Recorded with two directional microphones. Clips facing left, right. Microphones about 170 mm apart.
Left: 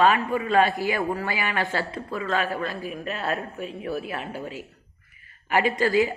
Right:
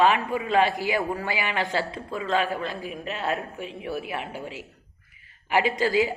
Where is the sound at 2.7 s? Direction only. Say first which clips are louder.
Left 1 dB; 20° right (ahead or behind).